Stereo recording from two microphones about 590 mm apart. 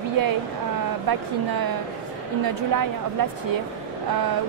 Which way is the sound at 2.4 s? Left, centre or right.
Right.